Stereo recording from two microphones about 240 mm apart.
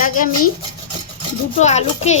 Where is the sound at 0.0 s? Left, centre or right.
Left.